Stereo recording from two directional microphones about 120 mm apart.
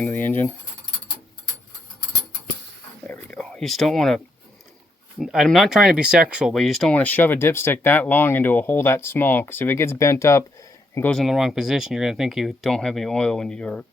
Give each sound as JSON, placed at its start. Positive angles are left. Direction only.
{"t": 0.0, "sound": "speech", "side_deg": 15}
{"t": 3.1, "sound": "a sound", "side_deg": 10}
{"t": 5.2, "sound": "speech", "side_deg": 0}
{"t": 6.9, "sound": "speech", "side_deg": 15}
{"t": 11.0, "sound": "speech", "side_deg": 5}